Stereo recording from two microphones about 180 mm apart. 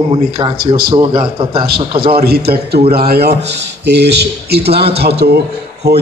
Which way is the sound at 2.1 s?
60° right (ahead or behind).